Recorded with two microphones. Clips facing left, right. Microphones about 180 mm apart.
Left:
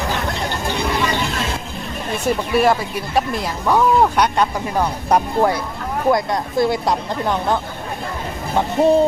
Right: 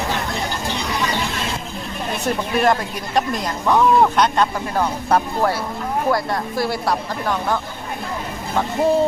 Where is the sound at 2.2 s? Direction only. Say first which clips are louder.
Left 2 dB; 10° left (ahead or behind).